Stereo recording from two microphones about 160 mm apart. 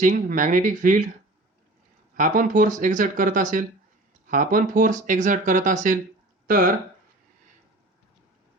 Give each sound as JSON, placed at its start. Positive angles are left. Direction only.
{"t": 0.0, "sound": "speech", "side_deg": -55}
{"t": 2.1, "sound": "speech", "side_deg": -55}